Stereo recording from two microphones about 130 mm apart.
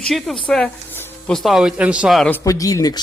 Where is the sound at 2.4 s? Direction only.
25° left (ahead or behind).